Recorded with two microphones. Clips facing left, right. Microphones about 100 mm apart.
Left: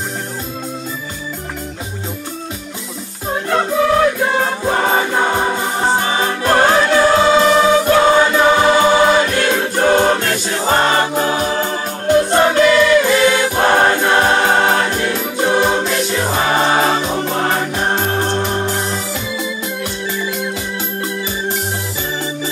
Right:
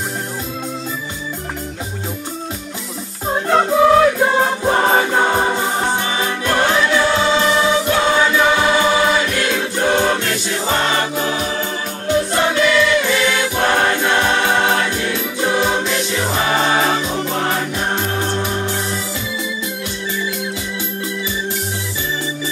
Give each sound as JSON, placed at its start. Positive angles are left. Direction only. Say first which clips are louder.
{"t": 4.6, "sound": "choir", "louder": "right 1 dB", "side_deg": -5}
{"t": 5.9, "sound": "music", "louder": "left 3 dB", "side_deg": 35}
{"t": 21.2, "sound": "organ", "louder": "left 2 dB", "side_deg": 45}